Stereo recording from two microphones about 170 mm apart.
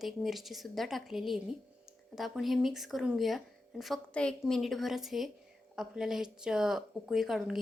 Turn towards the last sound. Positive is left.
turn(degrees=0)  # may be behind; listen again after turning